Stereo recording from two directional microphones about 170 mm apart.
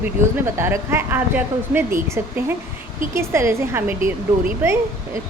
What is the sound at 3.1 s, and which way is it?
Speech, 15° right (ahead or behind).